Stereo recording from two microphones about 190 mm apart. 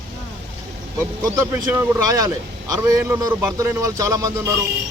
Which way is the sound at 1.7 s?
20° right (ahead or behind).